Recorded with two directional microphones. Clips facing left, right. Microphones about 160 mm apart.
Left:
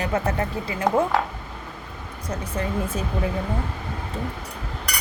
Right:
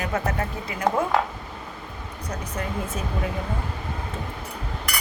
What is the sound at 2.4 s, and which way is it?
Speech, 30° left (ahead or behind).